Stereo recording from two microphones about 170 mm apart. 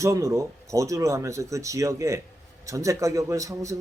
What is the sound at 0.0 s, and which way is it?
Speech, 15° right (ahead or behind).